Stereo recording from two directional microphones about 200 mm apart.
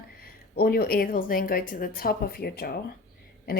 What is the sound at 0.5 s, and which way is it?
Speech, 50° left (ahead or behind).